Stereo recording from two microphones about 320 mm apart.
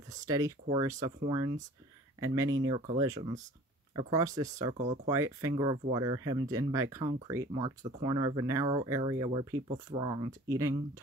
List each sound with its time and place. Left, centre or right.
0.1 s speech: centre